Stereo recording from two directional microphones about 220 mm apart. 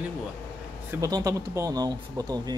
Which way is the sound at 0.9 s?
15° right (ahead or behind).